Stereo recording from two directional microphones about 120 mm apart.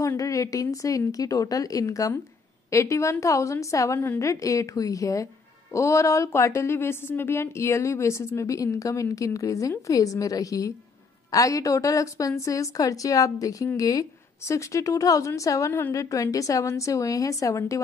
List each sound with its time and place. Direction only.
0.0 s speech: 25° left (ahead or behind)